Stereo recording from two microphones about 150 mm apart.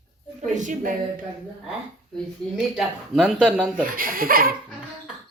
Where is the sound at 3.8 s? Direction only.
70° right (ahead or behind).